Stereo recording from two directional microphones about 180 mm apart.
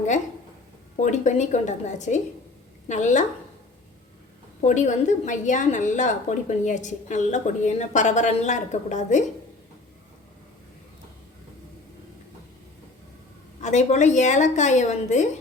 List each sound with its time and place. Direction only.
0.9 s a woman's voice: 40° left (ahead or behind)
4.6 s a woman's voice: 40° left (ahead or behind)
13.6 s a woman's voice: 40° left (ahead or behind)